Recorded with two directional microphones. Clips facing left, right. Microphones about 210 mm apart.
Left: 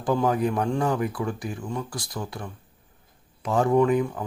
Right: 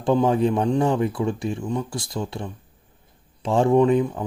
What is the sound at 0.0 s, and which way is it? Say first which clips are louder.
Speech: right 4 dB; 25° right (ahead or behind).